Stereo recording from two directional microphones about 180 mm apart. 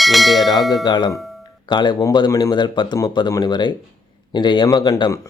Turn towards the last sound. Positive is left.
turn(degrees=20)  # may be behind; listen again after turning